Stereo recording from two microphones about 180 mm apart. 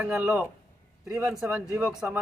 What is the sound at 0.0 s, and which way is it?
A man's voice, 5° right (ahead or behind).